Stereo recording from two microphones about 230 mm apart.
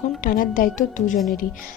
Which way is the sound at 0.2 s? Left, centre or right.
Left.